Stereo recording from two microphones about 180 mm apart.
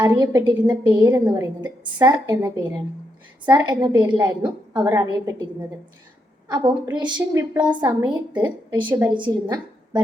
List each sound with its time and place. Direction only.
0.0 s a woman's voice: 20° right (ahead or behind)
1.2 s a woman's voice: 10° right (ahead or behind)
2.0 s a woman's voice: 20° right (ahead or behind)
3.5 s a woman's voice: 20° right (ahead or behind)
6.5 s a woman's voice: 25° right (ahead or behind)
7.5 s a woman's voice: 10° right (ahead or behind)
7.8 s a woman's voice: 20° right (ahead or behind)